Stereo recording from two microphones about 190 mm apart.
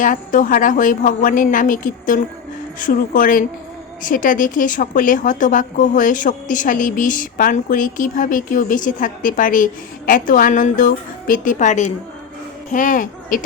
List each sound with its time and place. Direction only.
0.0 s a woman's voice: 45° left (ahead or behind)